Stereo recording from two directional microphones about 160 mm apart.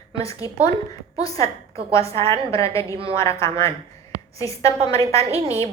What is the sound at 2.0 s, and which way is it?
Speech, 35° right (ahead or behind).